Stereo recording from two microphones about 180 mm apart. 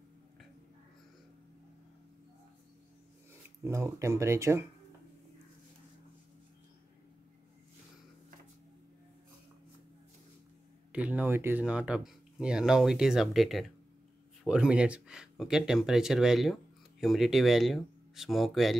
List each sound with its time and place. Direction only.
3.6 s speech: 15° right (ahead or behind)
10.9 s speech: 5° right (ahead or behind)